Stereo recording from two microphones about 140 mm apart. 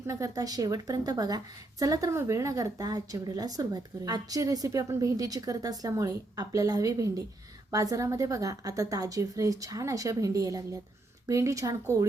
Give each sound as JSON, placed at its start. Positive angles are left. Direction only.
{"t": 0.1, "sound": "a woman's voice", "side_deg": -25}